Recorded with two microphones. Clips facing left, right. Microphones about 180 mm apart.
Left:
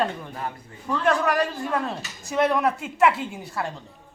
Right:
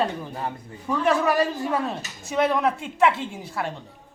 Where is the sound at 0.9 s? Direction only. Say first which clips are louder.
Right 1 dB; 5° right (ahead or behind).